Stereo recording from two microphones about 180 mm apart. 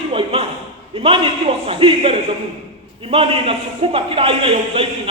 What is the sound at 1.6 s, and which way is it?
A man's voice, 35° right (ahead or behind).